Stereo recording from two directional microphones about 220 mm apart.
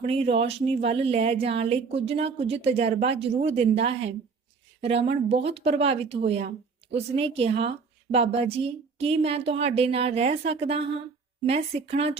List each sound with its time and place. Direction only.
0.0 s a woman's voice: 30° right (ahead or behind)
5.5 s a woman's voice: 25° right (ahead or behind)